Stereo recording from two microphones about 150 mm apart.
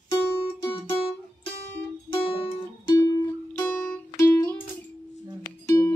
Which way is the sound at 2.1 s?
35° left (ahead or behind).